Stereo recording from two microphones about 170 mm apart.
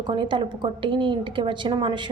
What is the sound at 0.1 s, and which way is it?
A woman's voice, 30° right (ahead or behind).